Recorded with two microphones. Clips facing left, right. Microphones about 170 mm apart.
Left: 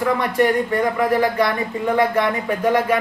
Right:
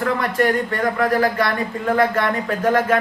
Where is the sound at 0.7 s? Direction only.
15° left (ahead or behind).